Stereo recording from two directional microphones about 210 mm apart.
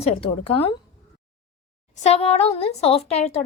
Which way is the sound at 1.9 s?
30° left (ahead or behind).